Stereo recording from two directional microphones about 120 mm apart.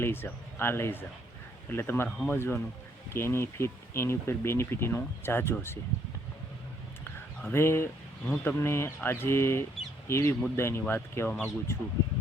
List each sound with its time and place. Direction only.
0.0 s speech: 20° left (ahead or behind)
7.5 s speech: 20° left (ahead or behind)